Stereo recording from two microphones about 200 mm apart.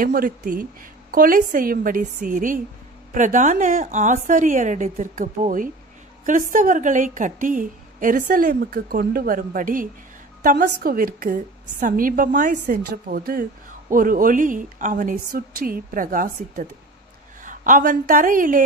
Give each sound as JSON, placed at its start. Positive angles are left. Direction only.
{"t": 0.0, "sound": "a woman's voice", "side_deg": -45}